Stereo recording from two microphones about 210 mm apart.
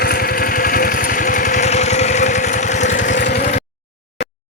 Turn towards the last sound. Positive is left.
turn(degrees=50)  # may be behind; listen again after turning